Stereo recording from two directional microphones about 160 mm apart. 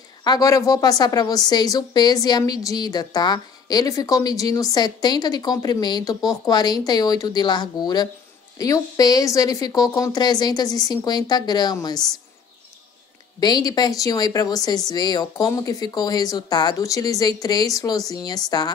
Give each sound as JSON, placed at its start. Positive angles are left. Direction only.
{"t": 0.2, "sound": "a woman's voice", "side_deg": 25}
{"t": 13.4, "sound": "a woman's voice", "side_deg": 25}